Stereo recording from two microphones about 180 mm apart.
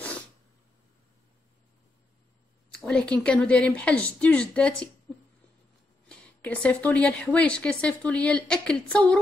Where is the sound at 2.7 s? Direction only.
5° left (ahead or behind).